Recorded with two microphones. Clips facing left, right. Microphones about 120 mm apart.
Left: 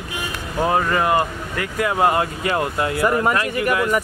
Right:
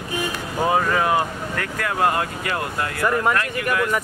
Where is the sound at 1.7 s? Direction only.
15° left (ahead or behind).